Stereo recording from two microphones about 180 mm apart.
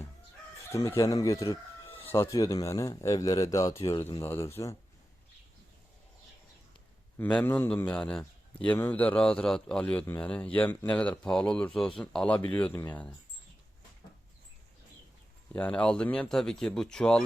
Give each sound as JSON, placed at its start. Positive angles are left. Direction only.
{"t": 0.7, "sound": "a man's voice", "side_deg": 15}
{"t": 7.2, "sound": "a man's voice", "side_deg": 10}
{"t": 15.5, "sound": "speech", "side_deg": 5}